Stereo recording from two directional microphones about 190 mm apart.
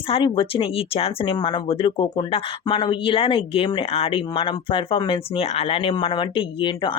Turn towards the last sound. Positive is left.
turn(degrees=25)  # may be behind; listen again after turning